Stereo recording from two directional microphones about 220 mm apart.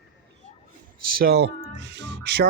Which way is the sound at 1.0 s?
45° right (ahead or behind).